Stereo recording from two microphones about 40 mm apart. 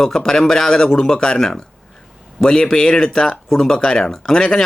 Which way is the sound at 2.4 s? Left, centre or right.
Left.